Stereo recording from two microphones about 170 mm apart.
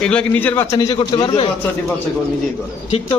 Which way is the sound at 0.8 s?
30° left (ahead or behind).